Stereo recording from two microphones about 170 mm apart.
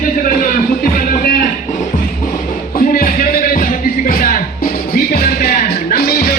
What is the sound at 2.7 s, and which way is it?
Music, 55° left (ahead or behind).